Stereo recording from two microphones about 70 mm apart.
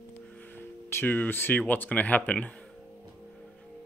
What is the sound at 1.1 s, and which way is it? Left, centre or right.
A man's voice, left.